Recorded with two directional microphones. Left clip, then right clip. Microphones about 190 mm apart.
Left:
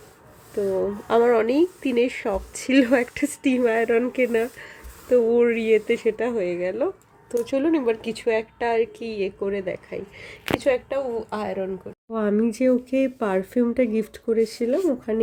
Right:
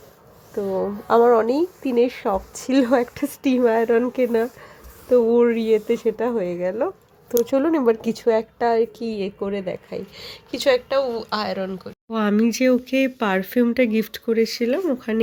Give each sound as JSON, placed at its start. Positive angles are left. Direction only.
{"t": 0.7, "sound": "a woman's voice", "side_deg": -10}
{"t": 7.5, "sound": "a woman's voice", "side_deg": -30}
{"t": 10.6, "sound": "speech", "side_deg": -5}